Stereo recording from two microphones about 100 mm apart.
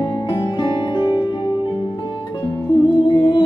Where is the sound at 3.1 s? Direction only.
50° left (ahead or behind).